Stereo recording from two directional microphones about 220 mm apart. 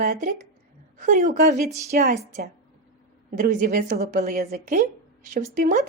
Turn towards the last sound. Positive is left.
turn(degrees=-35)  # may be behind; listen again after turning